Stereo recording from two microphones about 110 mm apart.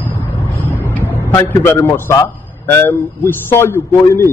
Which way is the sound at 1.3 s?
25° left (ahead or behind).